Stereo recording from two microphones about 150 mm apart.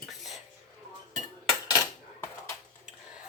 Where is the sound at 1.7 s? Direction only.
20° left (ahead or behind).